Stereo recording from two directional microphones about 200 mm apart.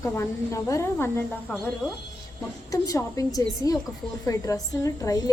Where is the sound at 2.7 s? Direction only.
15° left (ahead or behind).